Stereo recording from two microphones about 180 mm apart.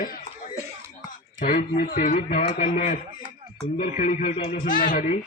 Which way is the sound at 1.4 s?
45° left (ahead or behind).